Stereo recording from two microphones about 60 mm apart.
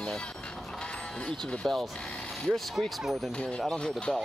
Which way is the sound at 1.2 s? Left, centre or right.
Centre.